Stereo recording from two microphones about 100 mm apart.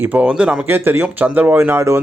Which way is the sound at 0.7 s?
20° right (ahead or behind).